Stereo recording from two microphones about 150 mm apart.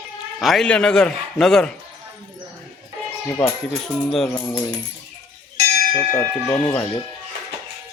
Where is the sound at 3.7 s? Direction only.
Centre (ahead or behind).